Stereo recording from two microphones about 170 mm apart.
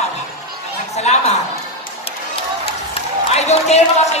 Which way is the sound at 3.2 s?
40° left (ahead or behind).